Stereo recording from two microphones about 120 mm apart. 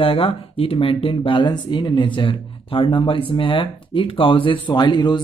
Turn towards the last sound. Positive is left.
turn(degrees=40)  # may be behind; listen again after turning